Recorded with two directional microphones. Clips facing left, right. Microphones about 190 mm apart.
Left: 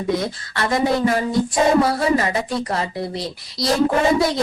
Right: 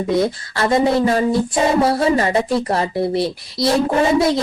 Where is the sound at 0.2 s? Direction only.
25° right (ahead or behind).